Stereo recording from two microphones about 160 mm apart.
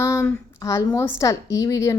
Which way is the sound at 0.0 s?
15° left (ahead or behind).